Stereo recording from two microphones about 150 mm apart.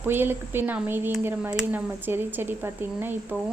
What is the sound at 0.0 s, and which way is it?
Speech, 15° right (ahead or behind).